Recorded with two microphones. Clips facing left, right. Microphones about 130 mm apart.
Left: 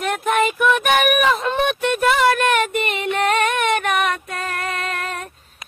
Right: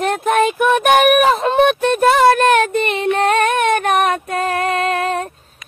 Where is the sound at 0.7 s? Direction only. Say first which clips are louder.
Right 7 dB; 40° right (ahead or behind).